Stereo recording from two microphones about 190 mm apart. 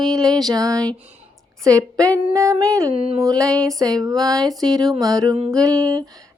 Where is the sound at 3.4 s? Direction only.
5° left (ahead or behind).